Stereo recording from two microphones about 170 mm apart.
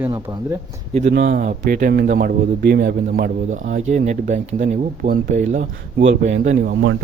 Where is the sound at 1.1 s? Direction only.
55° right (ahead or behind).